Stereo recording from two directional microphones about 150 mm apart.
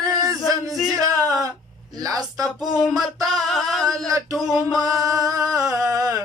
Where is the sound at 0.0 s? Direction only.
25° right (ahead or behind).